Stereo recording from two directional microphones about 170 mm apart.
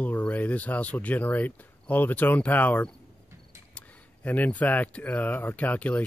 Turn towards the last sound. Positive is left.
turn(degrees=10)  # may be behind; listen again after turning